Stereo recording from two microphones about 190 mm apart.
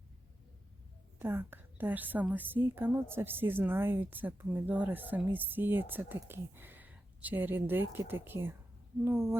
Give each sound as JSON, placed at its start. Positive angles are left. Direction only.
{"t": 1.2, "sound": "a woman's voice", "side_deg": -10}